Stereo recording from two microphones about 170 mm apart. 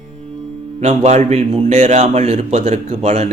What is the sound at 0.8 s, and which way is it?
A man's voice, 40° right (ahead or behind).